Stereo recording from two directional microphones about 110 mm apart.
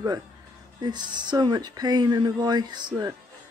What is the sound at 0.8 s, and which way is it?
Speech, 40° right (ahead or behind).